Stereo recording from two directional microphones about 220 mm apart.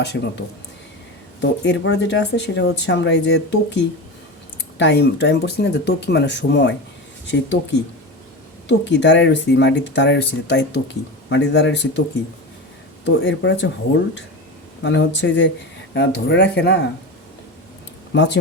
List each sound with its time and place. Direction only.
0.0 s speech: 50° left (ahead or behind)
13.1 s speech: 55° left (ahead or behind)
14.8 s speech: 55° left (ahead or behind)
18.1 s speech: 55° left (ahead or behind)